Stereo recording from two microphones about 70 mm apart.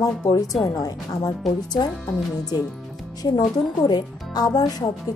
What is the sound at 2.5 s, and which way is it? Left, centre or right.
Speech, left.